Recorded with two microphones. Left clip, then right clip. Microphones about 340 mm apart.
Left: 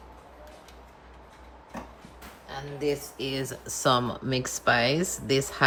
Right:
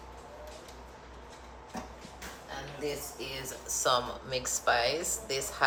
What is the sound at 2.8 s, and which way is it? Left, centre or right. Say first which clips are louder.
Speech: left 8 dB; left.